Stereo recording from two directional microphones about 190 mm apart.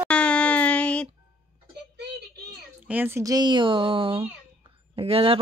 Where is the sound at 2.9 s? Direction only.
10° right (ahead or behind).